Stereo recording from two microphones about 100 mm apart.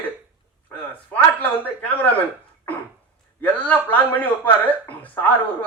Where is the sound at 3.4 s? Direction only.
15° left (ahead or behind).